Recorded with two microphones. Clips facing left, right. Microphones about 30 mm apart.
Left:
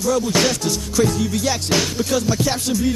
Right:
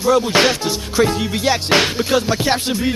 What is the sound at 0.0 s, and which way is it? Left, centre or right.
Music, right.